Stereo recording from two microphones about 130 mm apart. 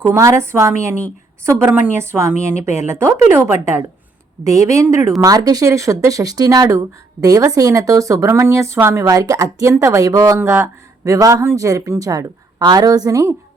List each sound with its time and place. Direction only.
0.0 s speech: 25° right (ahead or behind)